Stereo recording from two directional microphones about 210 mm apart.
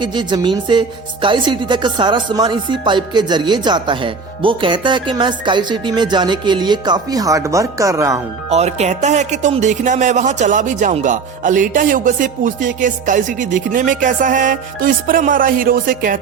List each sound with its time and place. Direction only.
0.0 s speech: 20° right (ahead or behind)
8.4 s speech: 30° right (ahead or behind)